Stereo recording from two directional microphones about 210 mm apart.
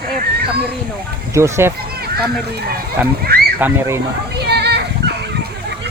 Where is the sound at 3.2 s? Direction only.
45° right (ahead or behind).